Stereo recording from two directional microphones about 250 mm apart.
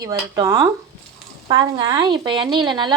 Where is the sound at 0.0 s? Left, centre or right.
Centre.